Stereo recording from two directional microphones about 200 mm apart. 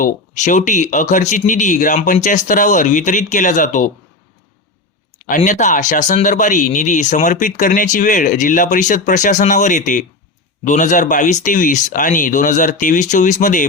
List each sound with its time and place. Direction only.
0.0 s speech: 40° left (ahead or behind)
5.4 s speech: 40° left (ahead or behind)